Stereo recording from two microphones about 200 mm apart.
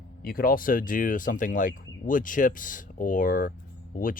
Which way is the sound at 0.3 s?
45° left (ahead or behind).